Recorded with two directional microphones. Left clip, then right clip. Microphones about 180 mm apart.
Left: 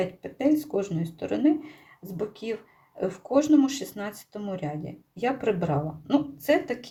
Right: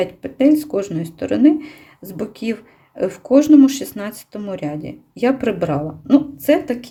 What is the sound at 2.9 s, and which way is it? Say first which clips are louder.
Speech: right 9 dB; 40° right (ahead or behind).